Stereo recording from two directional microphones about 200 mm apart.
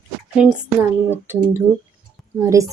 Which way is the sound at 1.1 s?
10° right (ahead or behind).